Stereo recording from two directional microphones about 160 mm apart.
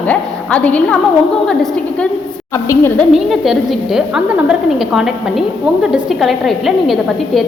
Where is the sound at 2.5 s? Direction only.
20° left (ahead or behind).